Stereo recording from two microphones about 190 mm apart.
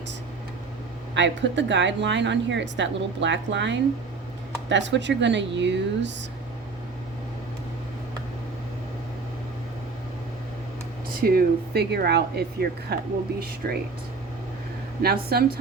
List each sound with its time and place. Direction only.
1.1 s a woman's voice: 70° right (ahead or behind)
11.2 s speech: 50° right (ahead or behind)
15.0 s speech: 55° right (ahead or behind)